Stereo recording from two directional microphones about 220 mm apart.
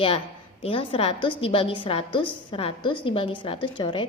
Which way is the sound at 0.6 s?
25° left (ahead or behind).